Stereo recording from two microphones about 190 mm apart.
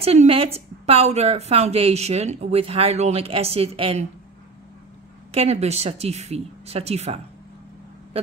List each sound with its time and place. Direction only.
0.0 s a woman's voice: 30° right (ahead or behind)
5.3 s a woman's voice: 35° right (ahead or behind)